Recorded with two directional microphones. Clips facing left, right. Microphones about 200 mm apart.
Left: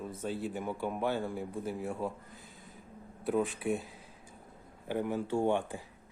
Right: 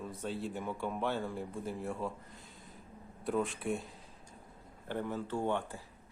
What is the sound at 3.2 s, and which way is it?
Speech, centre (ahead or behind).